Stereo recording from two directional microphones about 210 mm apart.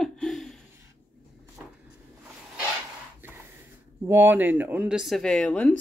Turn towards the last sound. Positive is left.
turn(degrees=5)  # may be behind; listen again after turning